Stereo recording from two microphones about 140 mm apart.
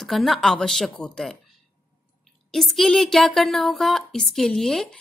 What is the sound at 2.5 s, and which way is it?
A woman's voice, centre (ahead or behind).